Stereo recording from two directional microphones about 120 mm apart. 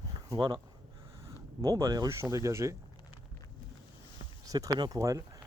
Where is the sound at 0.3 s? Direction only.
40° right (ahead or behind).